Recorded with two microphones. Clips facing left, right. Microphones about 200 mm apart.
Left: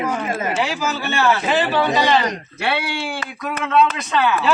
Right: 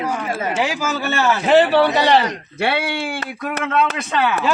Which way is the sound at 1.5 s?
60° right (ahead or behind).